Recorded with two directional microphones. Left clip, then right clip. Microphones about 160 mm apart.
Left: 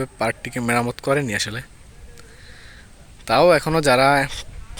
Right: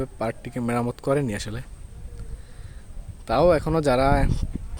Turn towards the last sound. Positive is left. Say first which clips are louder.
# left 5 dB
turn(degrees=-5)  # may be behind; listen again after turning